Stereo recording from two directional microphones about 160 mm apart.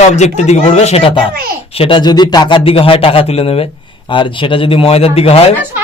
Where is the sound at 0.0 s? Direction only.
45° left (ahead or behind).